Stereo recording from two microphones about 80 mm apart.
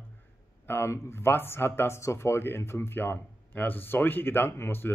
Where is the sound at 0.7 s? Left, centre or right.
Left.